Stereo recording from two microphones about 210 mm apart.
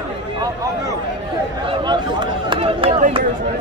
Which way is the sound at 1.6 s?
20° right (ahead or behind).